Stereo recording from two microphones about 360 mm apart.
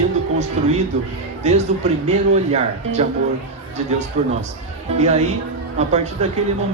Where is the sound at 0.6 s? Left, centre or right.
Centre.